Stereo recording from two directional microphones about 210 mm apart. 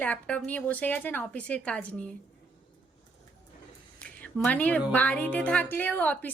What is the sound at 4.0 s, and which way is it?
Speech, 5° left (ahead or behind).